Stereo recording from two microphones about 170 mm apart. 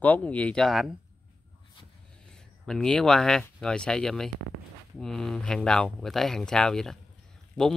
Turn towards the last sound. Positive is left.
turn(degrees=5)  # may be behind; listen again after turning